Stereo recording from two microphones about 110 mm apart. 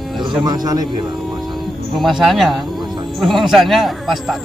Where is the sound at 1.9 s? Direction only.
Centre (ahead or behind).